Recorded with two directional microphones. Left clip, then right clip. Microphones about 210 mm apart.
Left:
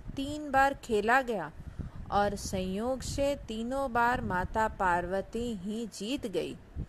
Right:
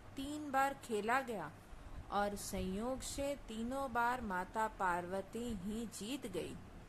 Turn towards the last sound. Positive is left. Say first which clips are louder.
# left 10 dB
turn(degrees=25)  # may be behind; listen again after turning